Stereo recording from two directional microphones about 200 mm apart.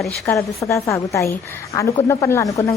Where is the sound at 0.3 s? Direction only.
15° left (ahead or behind).